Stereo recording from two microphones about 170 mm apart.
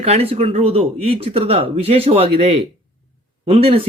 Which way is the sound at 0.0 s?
35° right (ahead or behind).